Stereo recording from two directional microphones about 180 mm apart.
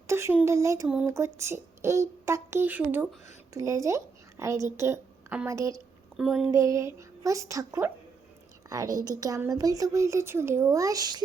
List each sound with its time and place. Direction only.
0.1 s a woman's voice: 15° right (ahead or behind)
6.1 s speech: 5° right (ahead or behind)
6.5 s a woman's voice: 15° right (ahead or behind)